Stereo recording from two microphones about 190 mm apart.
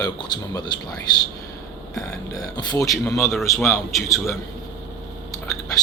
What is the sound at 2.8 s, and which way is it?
A man's voice, centre (ahead or behind).